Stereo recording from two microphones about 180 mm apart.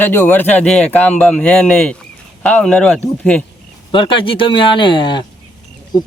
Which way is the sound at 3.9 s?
25° left (ahead or behind).